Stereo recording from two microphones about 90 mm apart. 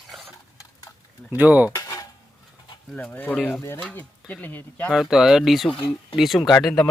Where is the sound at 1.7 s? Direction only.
40° left (ahead or behind).